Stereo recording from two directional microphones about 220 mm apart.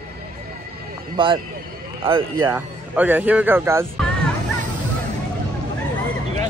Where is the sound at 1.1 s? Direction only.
20° right (ahead or behind).